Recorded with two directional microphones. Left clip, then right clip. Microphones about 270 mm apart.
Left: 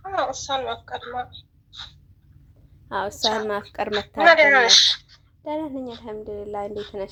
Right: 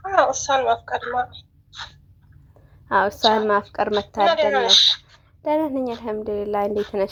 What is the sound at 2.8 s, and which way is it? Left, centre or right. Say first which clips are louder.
A woman's voice: right 6 dB; centre.